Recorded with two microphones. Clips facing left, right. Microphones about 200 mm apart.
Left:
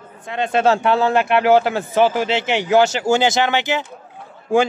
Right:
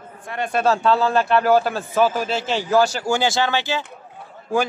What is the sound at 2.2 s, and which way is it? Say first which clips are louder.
Speech: left 4 dB; 75° left (ahead or behind).